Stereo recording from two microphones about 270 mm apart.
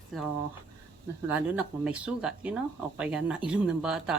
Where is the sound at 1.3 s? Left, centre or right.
Centre.